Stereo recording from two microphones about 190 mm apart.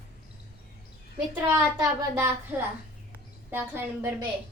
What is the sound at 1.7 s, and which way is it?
Speech, 15° right (ahead or behind).